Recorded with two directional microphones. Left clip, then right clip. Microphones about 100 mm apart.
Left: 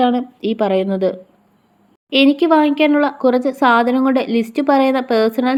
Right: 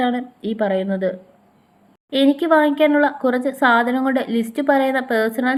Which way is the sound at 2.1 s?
35° left (ahead or behind).